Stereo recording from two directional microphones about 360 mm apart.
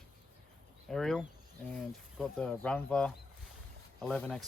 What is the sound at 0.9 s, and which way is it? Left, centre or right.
Speech, centre.